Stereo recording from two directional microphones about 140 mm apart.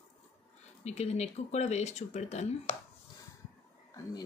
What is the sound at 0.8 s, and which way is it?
Speech, 50° left (ahead or behind).